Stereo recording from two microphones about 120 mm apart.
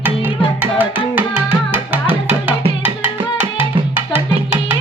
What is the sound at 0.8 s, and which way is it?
Music, 15° right (ahead or behind).